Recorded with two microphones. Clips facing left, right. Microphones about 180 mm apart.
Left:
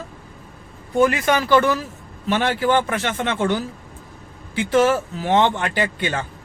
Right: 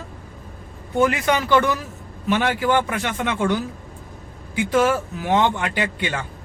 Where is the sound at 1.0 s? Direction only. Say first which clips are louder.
Left 2 dB; 15° right (ahead or behind).